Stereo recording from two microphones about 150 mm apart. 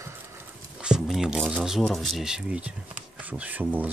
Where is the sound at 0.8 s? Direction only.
5° right (ahead or behind).